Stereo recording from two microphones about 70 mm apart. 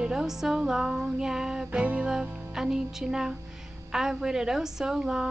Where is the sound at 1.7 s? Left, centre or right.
Centre.